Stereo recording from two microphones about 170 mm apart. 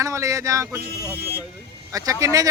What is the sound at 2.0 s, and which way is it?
Speech, 20° right (ahead or behind).